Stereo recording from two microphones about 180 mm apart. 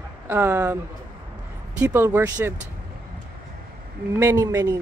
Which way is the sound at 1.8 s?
15° right (ahead or behind).